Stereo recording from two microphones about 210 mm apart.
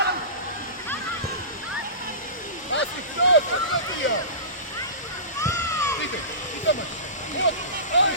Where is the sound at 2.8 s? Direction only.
65° left (ahead or behind).